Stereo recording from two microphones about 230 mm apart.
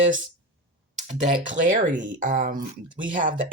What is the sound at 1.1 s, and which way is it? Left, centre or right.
Speech, right.